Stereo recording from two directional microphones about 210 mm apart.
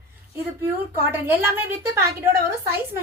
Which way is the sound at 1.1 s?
10° right (ahead or behind).